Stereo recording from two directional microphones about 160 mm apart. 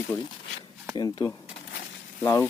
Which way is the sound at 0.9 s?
25° left (ahead or behind).